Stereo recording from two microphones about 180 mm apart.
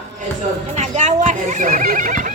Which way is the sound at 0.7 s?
40° right (ahead or behind).